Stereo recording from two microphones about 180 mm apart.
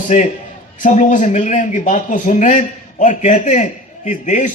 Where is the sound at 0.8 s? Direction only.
45° left (ahead or behind).